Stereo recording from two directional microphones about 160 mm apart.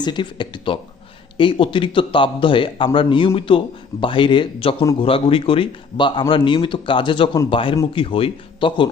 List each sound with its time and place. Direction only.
0.0 s speech: 30° left (ahead or behind)